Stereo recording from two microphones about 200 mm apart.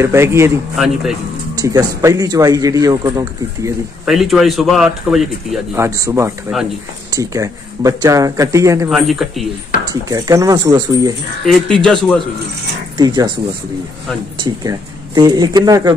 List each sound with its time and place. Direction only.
0.0 s a man's voice: 15° right (ahead or behind)
0.7 s a man's voice: centre (ahead or behind)
1.6 s a man's voice: 20° right (ahead or behind)
4.0 s a man's voice: centre (ahead or behind)
5.8 s a man's voice: 15° right (ahead or behind)
8.9 s a man's voice: centre (ahead or behind)
10.0 s a man's voice: 15° right (ahead or behind)
11.8 s a man's voice: 5° left (ahead or behind)
12.9 s speech: 20° right (ahead or behind)
14.4 s speech: 20° right (ahead or behind)